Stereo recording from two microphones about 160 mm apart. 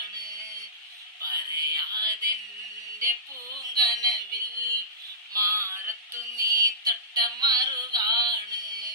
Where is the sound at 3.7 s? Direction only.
25° right (ahead or behind).